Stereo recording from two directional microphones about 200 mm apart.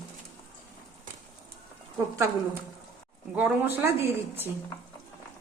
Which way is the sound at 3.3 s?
10° right (ahead or behind).